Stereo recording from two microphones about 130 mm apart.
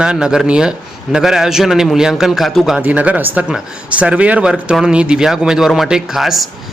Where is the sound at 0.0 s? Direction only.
5° right (ahead or behind).